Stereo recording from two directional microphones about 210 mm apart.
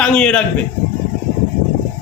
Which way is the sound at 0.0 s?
5° left (ahead or behind).